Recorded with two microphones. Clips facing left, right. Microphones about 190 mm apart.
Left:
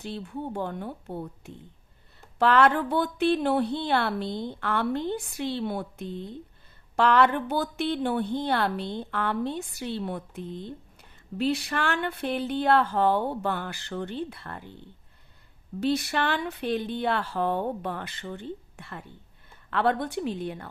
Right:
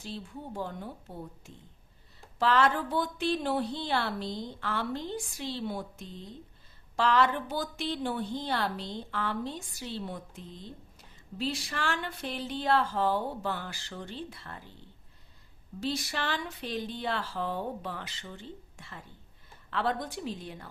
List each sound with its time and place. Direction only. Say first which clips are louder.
0.0 s a woman's voice: left 7 dB; 65° left (ahead or behind)
15.8 s a woman's voice: left 7 dB; 60° left (ahead or behind)